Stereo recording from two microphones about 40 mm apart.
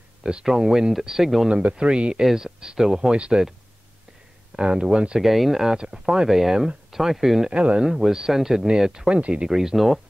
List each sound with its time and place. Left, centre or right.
0.2 s speech: centre
1.5 s speech: right
2.2 s speech: centre
4.6 s speech: right
5.2 s speech: centre
5.6 s speech: centre
7.5 s speech: right
7.8 s speech: centre
9.2 s speech: right
9.5 s speech: centre